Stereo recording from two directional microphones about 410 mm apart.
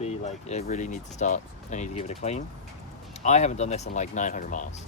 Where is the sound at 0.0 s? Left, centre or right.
Centre.